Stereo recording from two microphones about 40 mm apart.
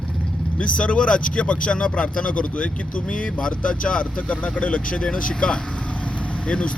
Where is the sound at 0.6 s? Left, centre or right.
Left.